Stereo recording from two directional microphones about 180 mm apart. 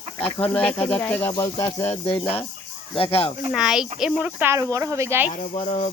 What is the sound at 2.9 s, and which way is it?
Speech, 30° left (ahead or behind).